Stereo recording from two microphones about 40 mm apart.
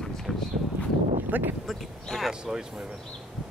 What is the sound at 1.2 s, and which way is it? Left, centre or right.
Speech, right.